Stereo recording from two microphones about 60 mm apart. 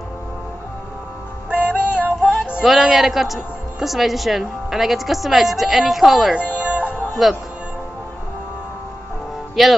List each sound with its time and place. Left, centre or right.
1.5 s music: right
2.6 s a woman's voice: centre
6.3 s music: right
7.2 s a woman's voice: centre
9.6 s a woman's voice: centre